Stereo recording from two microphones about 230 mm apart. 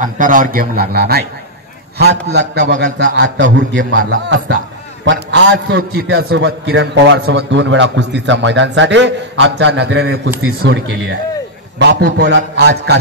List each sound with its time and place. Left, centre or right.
0.0 s a man's voice: right